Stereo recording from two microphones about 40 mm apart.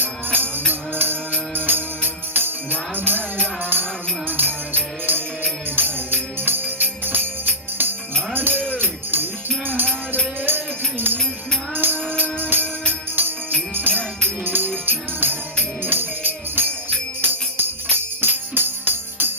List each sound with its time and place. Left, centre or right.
0.3 s music: right
8.3 s jingle bell: right
8.7 s music: right
10.4 s music: right
12.9 s jingle bell: right
14.4 s music: right